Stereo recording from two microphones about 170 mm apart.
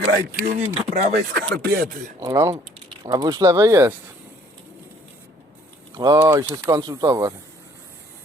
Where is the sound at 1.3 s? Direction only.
65° right (ahead or behind).